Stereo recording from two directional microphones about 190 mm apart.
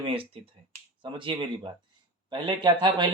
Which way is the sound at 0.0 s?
30° right (ahead or behind).